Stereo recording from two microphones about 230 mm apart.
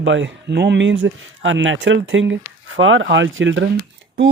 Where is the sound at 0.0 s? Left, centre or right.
Right.